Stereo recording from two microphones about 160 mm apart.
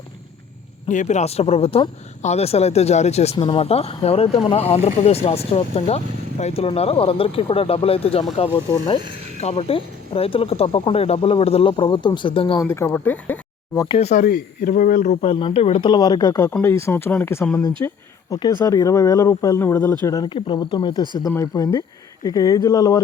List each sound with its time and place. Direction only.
0.9 s speech: 50° left (ahead or behind)
12.6 s speech: 15° left (ahead or behind)
13.8 s speech: 35° left (ahead or behind)
14.1 s speech: 60° left (ahead or behind); by 17.5 s 10° left (ahead or behind)
17.8 s speech: 25° left (ahead or behind)